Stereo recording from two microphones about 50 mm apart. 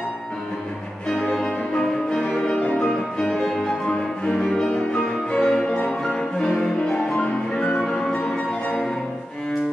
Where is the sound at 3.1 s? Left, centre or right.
Centre.